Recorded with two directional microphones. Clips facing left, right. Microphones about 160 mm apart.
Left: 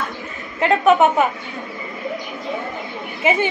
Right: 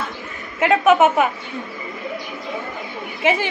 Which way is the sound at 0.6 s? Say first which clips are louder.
Even; centre (ahead or behind).